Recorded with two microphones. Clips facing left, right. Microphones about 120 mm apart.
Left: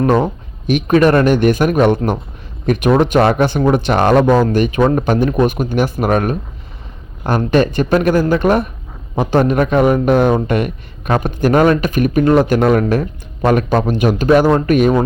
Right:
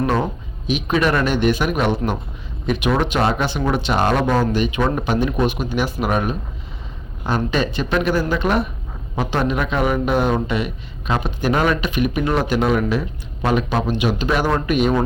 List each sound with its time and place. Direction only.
0.7 s speech: 50° left (ahead or behind)